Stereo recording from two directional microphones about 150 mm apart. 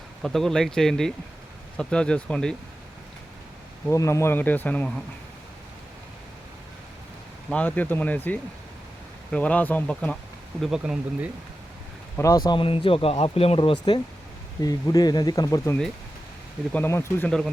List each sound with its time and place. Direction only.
0.2 s speech: centre (ahead or behind)
3.8 s speech: 20° left (ahead or behind)
7.5 s speech: 10° left (ahead or behind)
10.6 s speech: 5° right (ahead or behind)
12.1 s speech: 20° left (ahead or behind)
12.5 s speech: 35° left (ahead or behind); by 17.5 s 5° left (ahead or behind)